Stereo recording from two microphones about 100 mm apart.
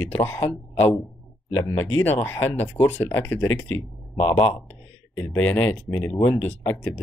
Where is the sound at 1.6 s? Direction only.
20° left (ahead or behind).